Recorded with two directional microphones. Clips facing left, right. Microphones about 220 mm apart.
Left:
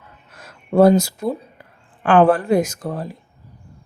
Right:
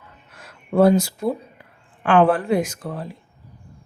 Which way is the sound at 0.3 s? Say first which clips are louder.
Left 3 dB; 40° left (ahead or behind).